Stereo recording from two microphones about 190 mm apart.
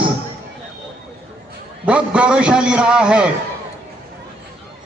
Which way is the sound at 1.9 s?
5° right (ahead or behind).